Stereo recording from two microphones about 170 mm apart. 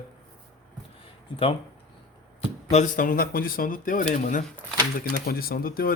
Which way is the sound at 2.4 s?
40° left (ahead or behind).